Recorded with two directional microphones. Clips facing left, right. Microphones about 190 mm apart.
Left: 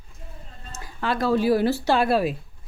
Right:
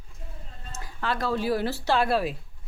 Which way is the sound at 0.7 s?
15° left (ahead or behind).